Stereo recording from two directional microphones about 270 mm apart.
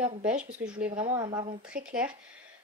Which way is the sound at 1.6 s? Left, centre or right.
Centre.